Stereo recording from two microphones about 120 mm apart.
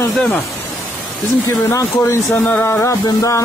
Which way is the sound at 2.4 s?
15° left (ahead or behind).